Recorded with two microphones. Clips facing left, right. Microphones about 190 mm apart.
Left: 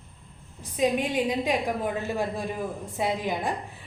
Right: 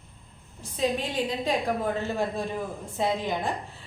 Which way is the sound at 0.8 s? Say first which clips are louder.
Left 3 dB; 15° left (ahead or behind).